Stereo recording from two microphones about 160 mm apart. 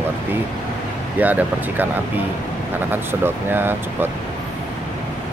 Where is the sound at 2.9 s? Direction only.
10° right (ahead or behind).